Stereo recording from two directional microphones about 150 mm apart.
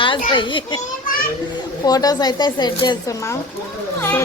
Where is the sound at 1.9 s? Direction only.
25° left (ahead or behind).